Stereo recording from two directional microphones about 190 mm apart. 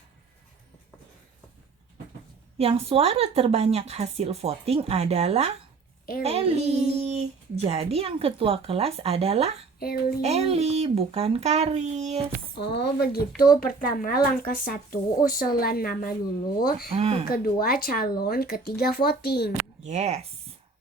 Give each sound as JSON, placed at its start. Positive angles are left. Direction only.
{"t": 2.6, "sound": "a child's voice", "side_deg": -30}
{"t": 9.8, "sound": "speech", "side_deg": 55}
{"t": 10.2, "sound": "a child's voice", "side_deg": -35}
{"t": 12.5, "sound": "speech", "side_deg": 60}
{"t": 16.9, "sound": "a child's voice", "side_deg": -30}
{"t": 17.2, "sound": "speech", "side_deg": 50}
{"t": 19.8, "sound": "a child's voice", "side_deg": -35}